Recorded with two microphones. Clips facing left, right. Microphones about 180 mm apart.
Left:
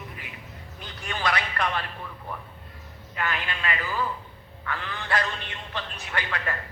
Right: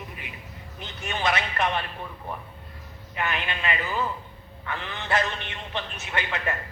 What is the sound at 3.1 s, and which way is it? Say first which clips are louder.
A man's voice: right 1 dB; 20° right (ahead or behind).